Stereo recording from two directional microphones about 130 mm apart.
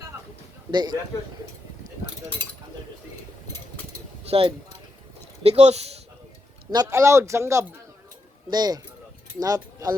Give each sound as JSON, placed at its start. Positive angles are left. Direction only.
{"t": 0.7, "sound": "speech", "side_deg": -35}
{"t": 4.3, "sound": "speech", "side_deg": -45}
{"t": 6.7, "sound": "speech", "side_deg": -25}